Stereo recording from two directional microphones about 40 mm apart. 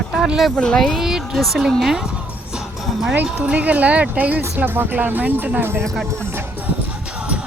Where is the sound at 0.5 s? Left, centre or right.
Left.